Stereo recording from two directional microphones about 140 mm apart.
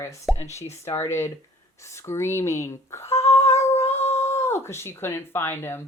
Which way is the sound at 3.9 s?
50° left (ahead or behind).